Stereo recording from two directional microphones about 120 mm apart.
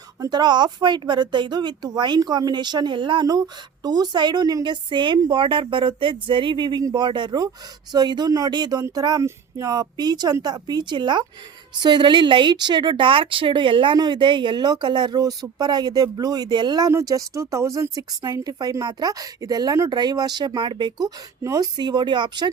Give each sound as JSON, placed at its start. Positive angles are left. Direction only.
{"t": 0.2, "sound": "speech", "side_deg": -35}